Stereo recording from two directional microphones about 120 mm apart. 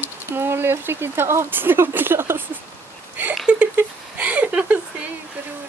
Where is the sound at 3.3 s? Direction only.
10° right (ahead or behind).